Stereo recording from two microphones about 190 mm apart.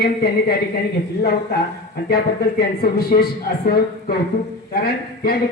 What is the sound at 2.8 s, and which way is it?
A man's voice, 55° left (ahead or behind).